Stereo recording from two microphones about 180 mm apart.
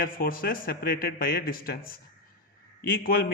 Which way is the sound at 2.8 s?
55° left (ahead or behind).